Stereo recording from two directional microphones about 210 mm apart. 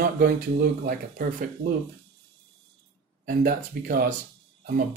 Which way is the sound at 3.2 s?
45° right (ahead or behind).